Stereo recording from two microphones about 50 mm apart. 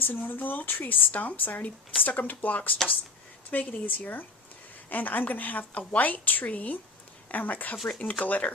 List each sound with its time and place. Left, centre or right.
0.0 s a woman's voice: left